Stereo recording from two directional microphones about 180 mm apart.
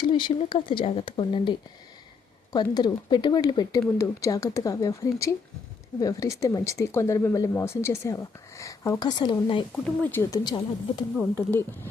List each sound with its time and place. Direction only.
0.0 s speech: 25° left (ahead or behind)
9.7 s speech: 5° left (ahead or behind)
10.3 s speech: 25° left (ahead or behind)
11.2 s speech: 10° left (ahead or behind)